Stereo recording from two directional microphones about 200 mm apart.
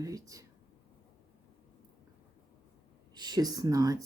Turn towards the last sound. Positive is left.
turn(degrees=-15)  # may be behind; listen again after turning